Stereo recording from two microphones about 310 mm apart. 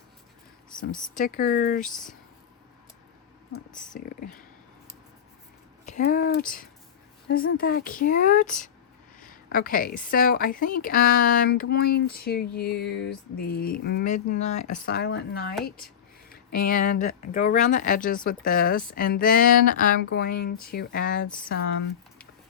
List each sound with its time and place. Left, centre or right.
1.1 s a woman's voice: left
3.7 s speech: centre
3.9 s a woman's voice: left
5.8 s a woman's voice: left